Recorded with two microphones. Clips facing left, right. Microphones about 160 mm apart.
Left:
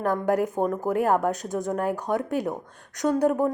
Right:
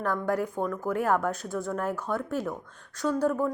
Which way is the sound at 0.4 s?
40° left (ahead or behind).